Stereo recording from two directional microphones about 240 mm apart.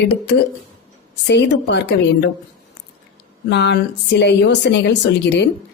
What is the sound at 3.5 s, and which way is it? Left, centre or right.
A woman's voice, left.